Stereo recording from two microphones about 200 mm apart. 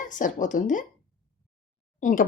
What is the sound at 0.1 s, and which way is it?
Speech, 40° left (ahead or behind).